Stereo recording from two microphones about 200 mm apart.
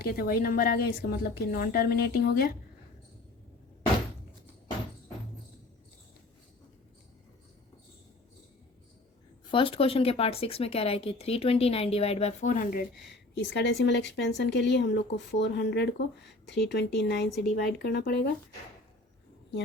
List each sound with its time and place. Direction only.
0.0 s a woman's voice: 50° left (ahead or behind)
9.5 s speech: 25° left (ahead or behind)
13.3 s speech: 60° left (ahead or behind)